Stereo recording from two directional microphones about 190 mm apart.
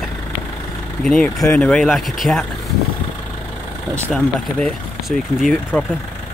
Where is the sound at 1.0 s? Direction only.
5° left (ahead or behind).